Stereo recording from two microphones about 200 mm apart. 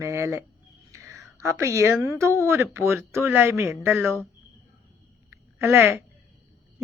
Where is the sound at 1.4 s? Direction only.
15° right (ahead or behind).